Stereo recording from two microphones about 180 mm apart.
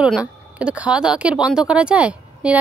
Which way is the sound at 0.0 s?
5° right (ahead or behind).